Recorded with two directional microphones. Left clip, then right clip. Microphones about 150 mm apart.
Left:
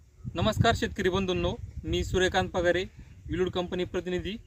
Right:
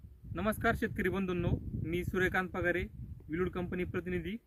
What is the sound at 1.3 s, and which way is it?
Speech, 10° right (ahead or behind).